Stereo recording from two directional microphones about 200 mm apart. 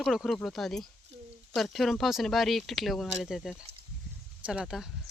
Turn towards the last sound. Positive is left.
turn(degrees=-5)  # may be behind; listen again after turning